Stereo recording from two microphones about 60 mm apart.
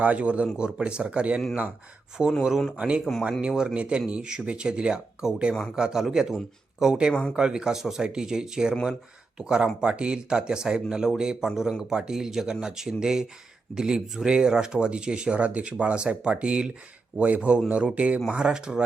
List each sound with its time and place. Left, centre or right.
0.0 s speech: right
3.0 s speech: centre
3.4 s speech: centre